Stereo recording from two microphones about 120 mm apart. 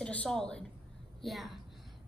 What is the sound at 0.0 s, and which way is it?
A woman's voice, 10° left (ahead or behind).